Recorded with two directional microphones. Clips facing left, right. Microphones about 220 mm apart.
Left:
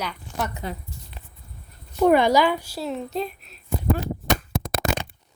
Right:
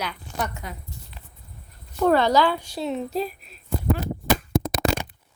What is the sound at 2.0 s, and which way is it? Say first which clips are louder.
A woman's voice: left 2 dB; 15° left (ahead or behind).